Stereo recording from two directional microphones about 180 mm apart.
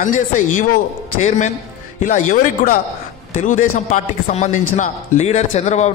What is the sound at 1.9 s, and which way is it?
A man's voice, 45° left (ahead or behind).